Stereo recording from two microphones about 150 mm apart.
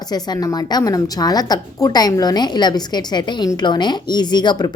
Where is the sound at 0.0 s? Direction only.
25° left (ahead or behind).